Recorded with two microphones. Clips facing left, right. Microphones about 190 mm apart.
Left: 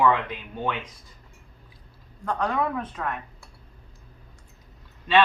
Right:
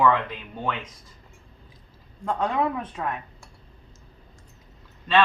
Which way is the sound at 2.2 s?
20° right (ahead or behind).